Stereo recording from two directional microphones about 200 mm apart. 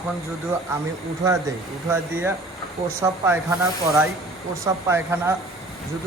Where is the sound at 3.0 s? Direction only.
15° right (ahead or behind).